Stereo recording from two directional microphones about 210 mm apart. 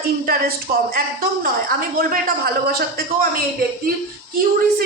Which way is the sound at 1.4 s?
45° right (ahead or behind).